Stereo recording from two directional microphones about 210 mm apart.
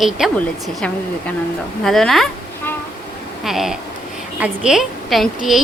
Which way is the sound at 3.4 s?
Centre (ahead or behind).